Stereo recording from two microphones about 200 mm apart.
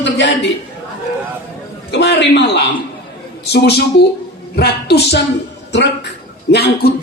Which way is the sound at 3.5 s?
55° left (ahead or behind).